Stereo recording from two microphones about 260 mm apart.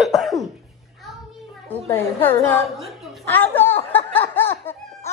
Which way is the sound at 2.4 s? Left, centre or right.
Centre.